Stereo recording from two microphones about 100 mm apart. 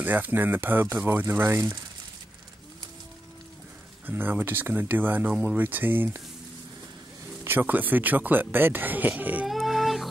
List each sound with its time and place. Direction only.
0.0 s speech: 20° right (ahead or behind)
4.0 s speech: 20° right (ahead or behind)
7.4 s speech: 20° right (ahead or behind)
9.5 s a sound: centre (ahead or behind)